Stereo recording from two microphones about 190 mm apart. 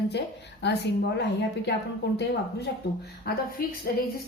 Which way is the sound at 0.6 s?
65° left (ahead or behind).